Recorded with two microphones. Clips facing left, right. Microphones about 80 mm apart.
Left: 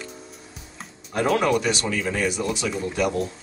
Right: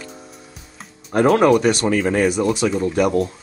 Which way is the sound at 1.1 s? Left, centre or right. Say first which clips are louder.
Right 7 dB; right.